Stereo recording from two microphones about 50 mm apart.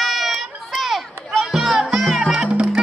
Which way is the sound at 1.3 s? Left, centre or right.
Centre.